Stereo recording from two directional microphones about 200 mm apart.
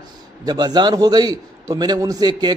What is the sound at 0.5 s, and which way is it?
A man's voice, 20° right (ahead or behind).